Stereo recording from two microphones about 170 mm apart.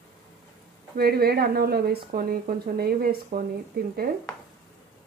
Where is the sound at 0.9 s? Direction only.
65° right (ahead or behind).